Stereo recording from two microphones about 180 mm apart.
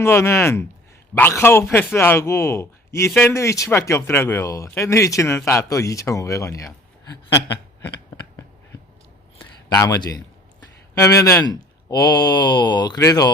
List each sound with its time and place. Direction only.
0.0 s speech: 15° left (ahead or behind)
9.7 s speech: 20° left (ahead or behind)